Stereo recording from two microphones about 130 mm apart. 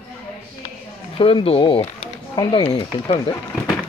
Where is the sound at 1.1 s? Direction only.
45° left (ahead or behind).